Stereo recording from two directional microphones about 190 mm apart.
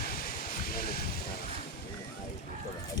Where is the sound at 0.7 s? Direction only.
55° left (ahead or behind).